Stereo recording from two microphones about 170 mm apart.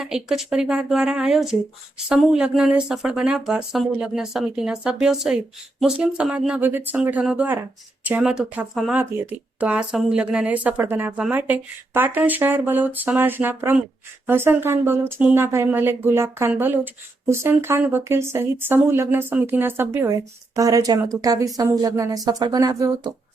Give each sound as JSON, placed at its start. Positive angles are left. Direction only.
{"t": 0.0, "sound": "speech", "side_deg": -5}